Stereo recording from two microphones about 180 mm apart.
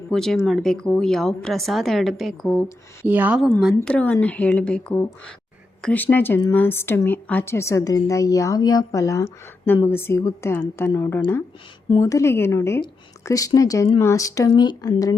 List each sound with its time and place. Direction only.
0.1 s speech: centre (ahead or behind)
3.8 s a woman's voice: 10° left (ahead or behind)